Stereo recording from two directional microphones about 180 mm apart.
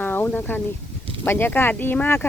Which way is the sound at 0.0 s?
10° left (ahead or behind).